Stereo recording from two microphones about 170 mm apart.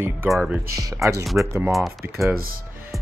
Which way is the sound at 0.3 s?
5° right (ahead or behind).